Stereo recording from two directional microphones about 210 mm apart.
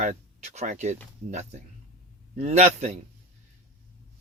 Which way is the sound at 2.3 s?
30° right (ahead or behind).